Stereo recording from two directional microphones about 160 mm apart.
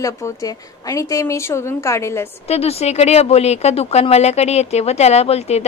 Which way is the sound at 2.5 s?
40° left (ahead or behind).